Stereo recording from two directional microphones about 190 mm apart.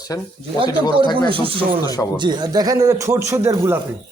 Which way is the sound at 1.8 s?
20° left (ahead or behind).